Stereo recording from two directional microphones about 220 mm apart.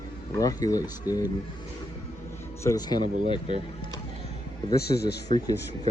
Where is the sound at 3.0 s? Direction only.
35° right (ahead or behind).